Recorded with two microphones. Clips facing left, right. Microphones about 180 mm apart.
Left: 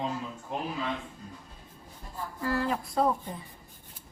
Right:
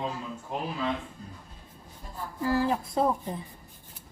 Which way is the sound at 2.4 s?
20° right (ahead or behind).